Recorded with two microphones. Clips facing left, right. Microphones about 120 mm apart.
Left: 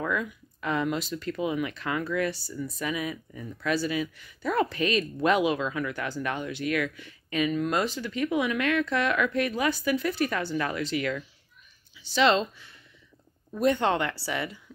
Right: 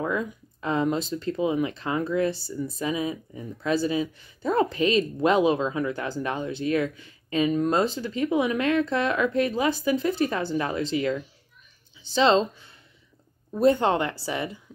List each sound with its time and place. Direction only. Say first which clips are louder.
0.0 s a sound: right 2 dB; 25° right (ahead or behind)
0.6 s speech: right 3 dB; 30° right (ahead or behind)
13.5 s speech: right 4 dB; 30° right (ahead or behind)